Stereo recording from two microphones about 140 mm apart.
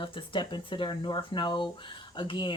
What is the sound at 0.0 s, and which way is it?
Speech, 35° left (ahead or behind).